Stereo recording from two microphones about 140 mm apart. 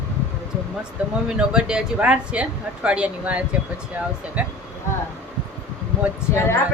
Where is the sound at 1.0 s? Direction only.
10° right (ahead or behind).